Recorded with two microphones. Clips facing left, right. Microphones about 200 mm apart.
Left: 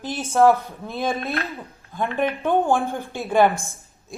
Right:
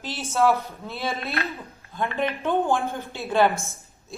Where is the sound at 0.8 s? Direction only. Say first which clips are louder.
Left 4 dB; 15° left (ahead or behind).